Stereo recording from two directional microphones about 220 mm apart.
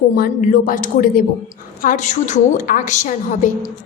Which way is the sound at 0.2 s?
40° left (ahead or behind).